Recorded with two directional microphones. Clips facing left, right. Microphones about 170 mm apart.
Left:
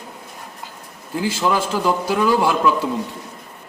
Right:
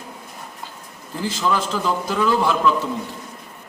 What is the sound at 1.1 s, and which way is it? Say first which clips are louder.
A man's voice: left 2 dB; 10° left (ahead or behind).